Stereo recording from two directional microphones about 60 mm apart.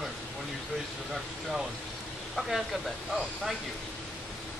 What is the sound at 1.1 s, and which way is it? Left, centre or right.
Speech, centre.